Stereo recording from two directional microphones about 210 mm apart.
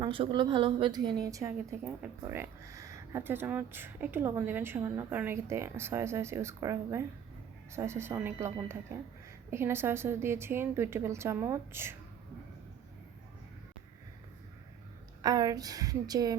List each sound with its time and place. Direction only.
0.0 s a woman's voice: 25° right (ahead or behind)
15.2 s a woman's voice: 20° right (ahead or behind)